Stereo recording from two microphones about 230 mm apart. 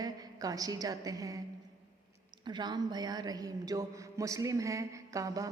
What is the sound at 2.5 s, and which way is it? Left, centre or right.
A woman's voice, centre.